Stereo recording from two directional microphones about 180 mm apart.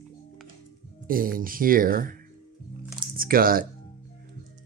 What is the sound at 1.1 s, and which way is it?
Speech, 50° right (ahead or behind).